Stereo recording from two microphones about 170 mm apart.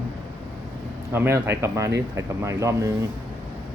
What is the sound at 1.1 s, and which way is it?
Speech, 15° right (ahead or behind).